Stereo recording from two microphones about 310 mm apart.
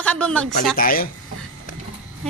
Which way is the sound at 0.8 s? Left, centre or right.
Left.